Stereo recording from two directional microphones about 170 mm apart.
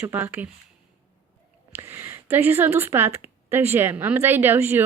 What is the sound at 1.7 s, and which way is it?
A woman's voice, 15° right (ahead or behind).